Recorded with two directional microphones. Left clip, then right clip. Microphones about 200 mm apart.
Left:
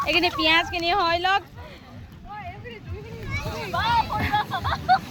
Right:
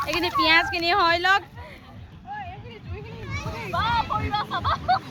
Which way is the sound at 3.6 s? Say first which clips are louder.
Left 1 dB; 30° right (ahead or behind).